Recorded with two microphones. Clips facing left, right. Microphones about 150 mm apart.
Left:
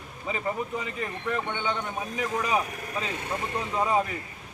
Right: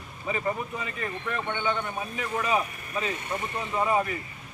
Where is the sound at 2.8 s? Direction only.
90° left.